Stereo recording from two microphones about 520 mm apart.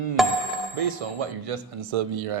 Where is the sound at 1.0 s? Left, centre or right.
Right.